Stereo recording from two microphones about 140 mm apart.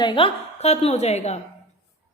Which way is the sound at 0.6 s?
50° left (ahead or behind).